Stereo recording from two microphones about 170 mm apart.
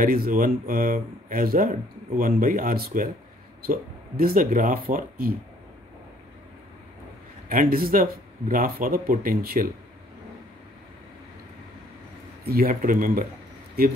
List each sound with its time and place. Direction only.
0.0 s speech: 55° right (ahead or behind)
4.2 s speech: 55° right (ahead or behind)
7.4 s speech: 60° right (ahead or behind)
12.4 s speech: 60° right (ahead or behind)